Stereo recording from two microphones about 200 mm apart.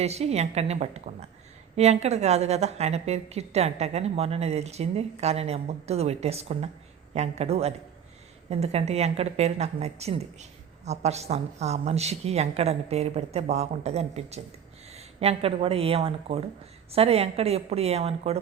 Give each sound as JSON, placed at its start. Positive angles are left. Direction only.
{"t": 0.0, "sound": "a woman's voice", "side_deg": -30}